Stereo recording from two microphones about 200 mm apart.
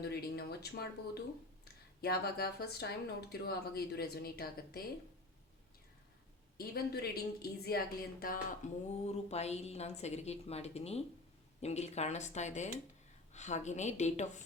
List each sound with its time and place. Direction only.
0.0 s speech: 55° left (ahead or behind)
6.6 s speech: 50° left (ahead or behind); by 14.3 s 35° left (ahead or behind)